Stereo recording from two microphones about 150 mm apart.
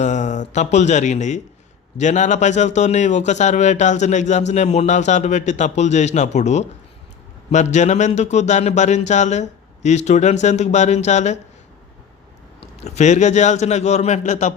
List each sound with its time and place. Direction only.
0.0 s a man's voice: 55° left (ahead or behind)
12.8 s a man's voice: 50° left (ahead or behind)